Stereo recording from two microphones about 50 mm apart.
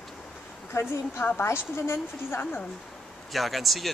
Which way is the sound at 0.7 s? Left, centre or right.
Left.